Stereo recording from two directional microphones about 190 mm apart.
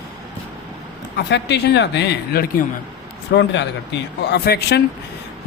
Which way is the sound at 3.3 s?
65° left (ahead or behind).